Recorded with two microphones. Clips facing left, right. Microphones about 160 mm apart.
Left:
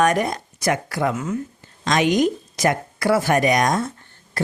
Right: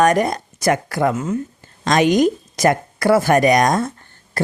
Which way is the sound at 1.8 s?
40° right (ahead or behind).